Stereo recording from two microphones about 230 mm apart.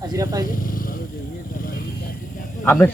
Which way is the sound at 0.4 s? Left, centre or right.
Left.